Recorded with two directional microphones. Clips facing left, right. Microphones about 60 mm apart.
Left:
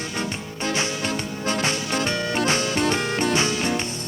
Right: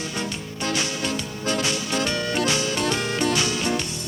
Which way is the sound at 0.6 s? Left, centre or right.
Left.